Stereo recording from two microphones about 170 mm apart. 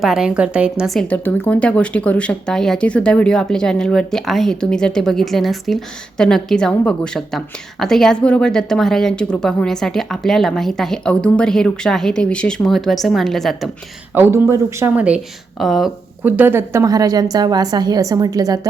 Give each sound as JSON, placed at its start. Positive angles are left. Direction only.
{"t": 0.0, "sound": "speech", "side_deg": -5}
{"t": 14.1, "sound": "speech", "side_deg": -10}
{"t": 16.2, "sound": "a woman's voice", "side_deg": -10}